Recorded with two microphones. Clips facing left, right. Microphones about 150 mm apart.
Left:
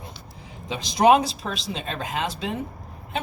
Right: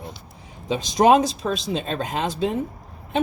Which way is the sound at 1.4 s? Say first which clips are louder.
Right 6 dB; 35° right (ahead or behind).